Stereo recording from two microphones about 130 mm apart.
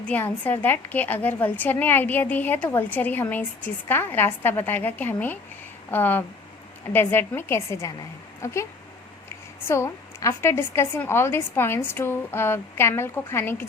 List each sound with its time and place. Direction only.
0.0 s a woman's voice: 10° left (ahead or behind)
9.6 s a woman's voice: 20° left (ahead or behind)